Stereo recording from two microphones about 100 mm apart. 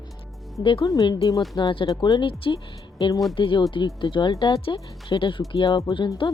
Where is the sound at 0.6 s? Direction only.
60° left (ahead or behind).